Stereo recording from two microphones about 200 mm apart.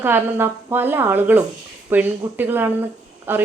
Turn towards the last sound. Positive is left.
turn(degrees=-10)  # may be behind; listen again after turning